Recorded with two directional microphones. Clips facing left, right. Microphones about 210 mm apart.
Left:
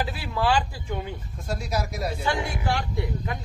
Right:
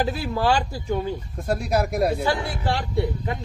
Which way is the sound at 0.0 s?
45° right (ahead or behind).